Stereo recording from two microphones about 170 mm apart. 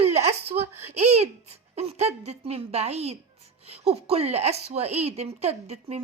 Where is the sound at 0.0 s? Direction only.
40° right (ahead or behind).